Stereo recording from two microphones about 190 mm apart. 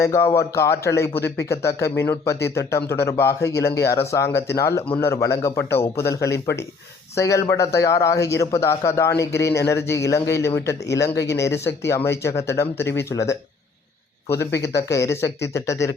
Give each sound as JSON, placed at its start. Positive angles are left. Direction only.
{"t": 0.0, "sound": "speech", "side_deg": 15}
{"t": 14.3, "sound": "speech", "side_deg": 60}
{"t": 14.8, "sound": "speech", "side_deg": 15}